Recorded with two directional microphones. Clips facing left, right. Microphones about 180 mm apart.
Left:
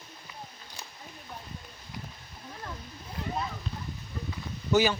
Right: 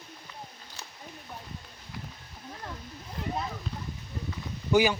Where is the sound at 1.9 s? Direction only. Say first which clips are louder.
Even; 15° left (ahead or behind).